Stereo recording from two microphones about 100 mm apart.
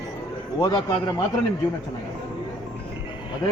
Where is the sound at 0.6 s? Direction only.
40° left (ahead or behind).